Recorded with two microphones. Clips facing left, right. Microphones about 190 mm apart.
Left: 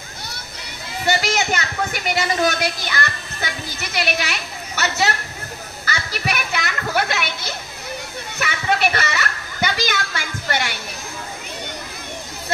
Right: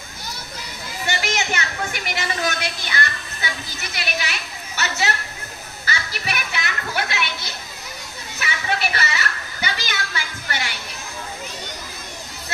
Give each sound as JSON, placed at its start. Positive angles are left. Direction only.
{"t": 1.0, "sound": "children playing", "side_deg": 40}
{"t": 2.1, "sound": "a woman's voice", "side_deg": 40}
{"t": 5.9, "sound": "music", "side_deg": 45}
{"t": 8.4, "sound": "a sound", "side_deg": 50}